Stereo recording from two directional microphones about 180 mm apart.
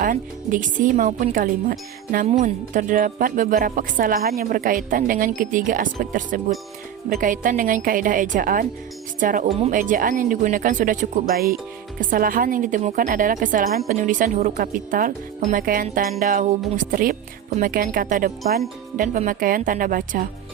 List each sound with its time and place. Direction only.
0.0 s a woman's voice: 50° right (ahead or behind)
9.7 s a woman's voice: 50° right (ahead or behind)
11.9 s a woman's voice: 50° right (ahead or behind)